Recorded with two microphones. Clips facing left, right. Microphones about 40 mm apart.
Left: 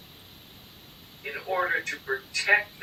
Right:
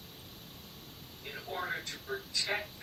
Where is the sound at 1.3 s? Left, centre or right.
Left.